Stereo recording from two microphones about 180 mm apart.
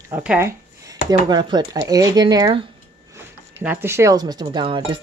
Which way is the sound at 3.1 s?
10° right (ahead or behind).